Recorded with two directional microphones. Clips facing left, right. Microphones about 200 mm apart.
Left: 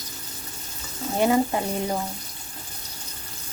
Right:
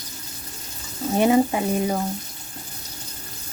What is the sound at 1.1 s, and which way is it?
Speech, 20° right (ahead or behind).